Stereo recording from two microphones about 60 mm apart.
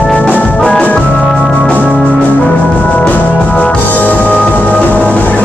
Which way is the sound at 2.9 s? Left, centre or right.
Left.